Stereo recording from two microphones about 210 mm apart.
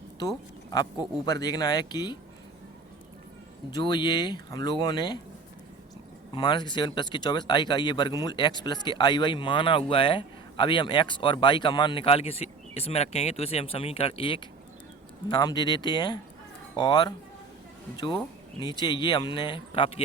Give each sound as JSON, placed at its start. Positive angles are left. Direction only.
{"t": 0.7, "sound": "speech", "side_deg": 20}
{"t": 3.7, "sound": "speech", "side_deg": 20}
{"t": 6.3, "sound": "speech", "side_deg": 20}